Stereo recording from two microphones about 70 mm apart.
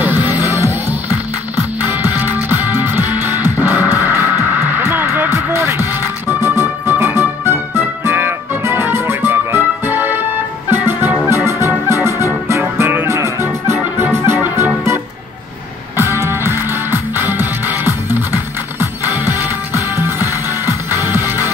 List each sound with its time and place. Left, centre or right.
0.0 s music: right
0.4 s music: right
1.8 s music: right
16.0 s music: right